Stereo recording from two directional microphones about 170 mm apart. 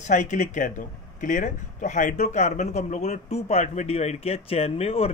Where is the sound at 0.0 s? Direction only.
45° left (ahead or behind).